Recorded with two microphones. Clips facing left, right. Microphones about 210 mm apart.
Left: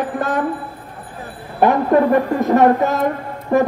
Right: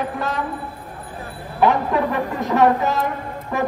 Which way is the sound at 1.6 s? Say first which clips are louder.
Left 4 dB; 50° left (ahead or behind).